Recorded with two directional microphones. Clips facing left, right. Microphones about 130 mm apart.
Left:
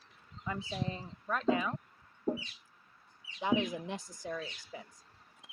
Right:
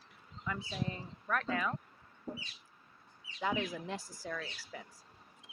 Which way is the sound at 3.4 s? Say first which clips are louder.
Left 4 dB; 20° left (ahead or behind).